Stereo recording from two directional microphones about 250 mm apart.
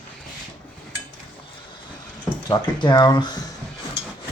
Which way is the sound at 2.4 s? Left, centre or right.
Centre.